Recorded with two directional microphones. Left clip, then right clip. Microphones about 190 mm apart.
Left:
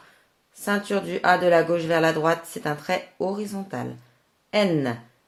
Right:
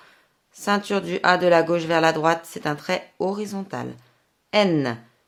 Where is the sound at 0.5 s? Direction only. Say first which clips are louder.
Right 2 dB; 30° right (ahead or behind).